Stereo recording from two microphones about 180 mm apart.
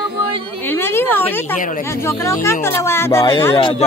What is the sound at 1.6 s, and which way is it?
Speech, 50° left (ahead or behind).